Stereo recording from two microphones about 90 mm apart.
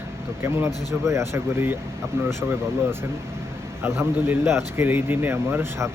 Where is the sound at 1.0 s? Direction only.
30° right (ahead or behind).